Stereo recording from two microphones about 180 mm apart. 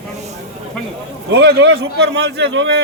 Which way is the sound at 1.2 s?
65° right (ahead or behind).